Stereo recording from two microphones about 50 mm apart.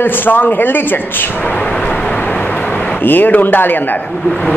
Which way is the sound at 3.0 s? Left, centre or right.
Left.